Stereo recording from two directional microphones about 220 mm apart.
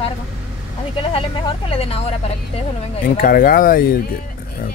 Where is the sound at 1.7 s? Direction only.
25° left (ahead or behind).